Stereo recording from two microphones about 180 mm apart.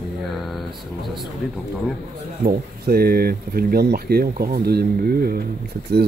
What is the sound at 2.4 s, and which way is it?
Speech, 60° right (ahead or behind).